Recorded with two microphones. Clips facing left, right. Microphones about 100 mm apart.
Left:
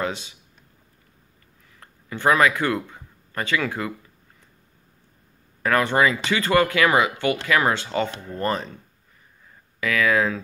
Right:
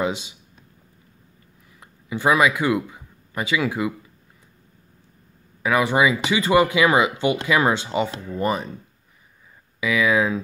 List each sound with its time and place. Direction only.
0.0 s speech: 15° right (ahead or behind)
1.8 s speech: 10° right (ahead or behind)
5.6 s speech: 10° right (ahead or behind)
9.8 s speech: 15° right (ahead or behind)